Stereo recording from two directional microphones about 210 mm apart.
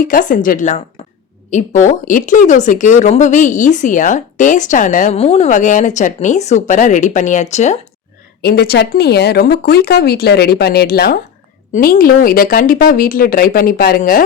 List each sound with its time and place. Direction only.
0.1 s speech: 40° left (ahead or behind)
8.4 s speech: 50° left (ahead or behind)